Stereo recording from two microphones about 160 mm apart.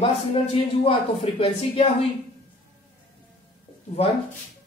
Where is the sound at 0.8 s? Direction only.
35° left (ahead or behind).